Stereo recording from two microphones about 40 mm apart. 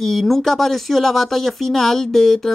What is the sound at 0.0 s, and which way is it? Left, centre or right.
Speech, centre.